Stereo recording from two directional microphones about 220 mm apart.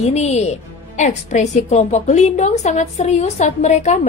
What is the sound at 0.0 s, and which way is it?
A woman's voice, 30° left (ahead or behind).